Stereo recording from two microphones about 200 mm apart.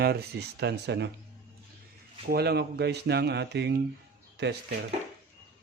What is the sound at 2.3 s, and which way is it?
Speech, 55° right (ahead or behind).